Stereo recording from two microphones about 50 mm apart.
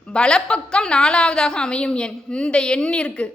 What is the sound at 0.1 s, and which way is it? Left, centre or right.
A woman's voice, centre.